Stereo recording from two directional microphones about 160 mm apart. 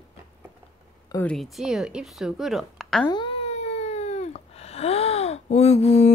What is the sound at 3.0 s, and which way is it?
Cat, 30° left (ahead or behind).